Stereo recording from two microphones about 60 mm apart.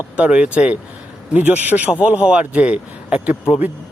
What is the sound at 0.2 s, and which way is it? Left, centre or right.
Speech, centre.